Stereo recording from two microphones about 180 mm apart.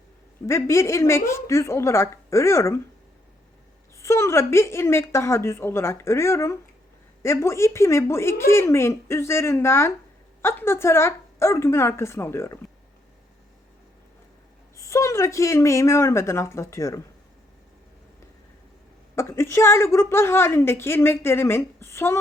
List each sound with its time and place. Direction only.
0.4 s a woman's voice: 15° left (ahead or behind)
3.9 s a woman's voice: 15° left (ahead or behind)
14.8 s a woman's voice: 15° left (ahead or behind)
19.1 s a woman's voice: 15° left (ahead or behind)